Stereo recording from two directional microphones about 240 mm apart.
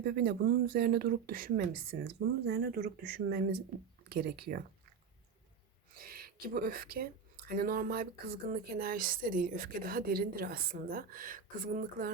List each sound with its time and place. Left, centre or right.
0.0 s speech: right
6.0 s speech: right